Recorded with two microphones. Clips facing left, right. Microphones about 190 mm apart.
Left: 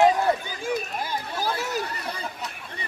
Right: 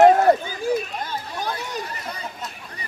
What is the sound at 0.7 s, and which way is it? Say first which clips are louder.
Chatter: right 5 dB; 35° right (ahead or behind).